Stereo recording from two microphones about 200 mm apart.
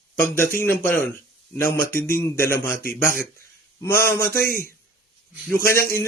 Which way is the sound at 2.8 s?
45° left (ahead or behind).